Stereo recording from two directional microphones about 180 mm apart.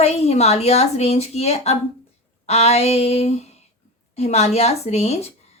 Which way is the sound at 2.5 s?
35° left (ahead or behind).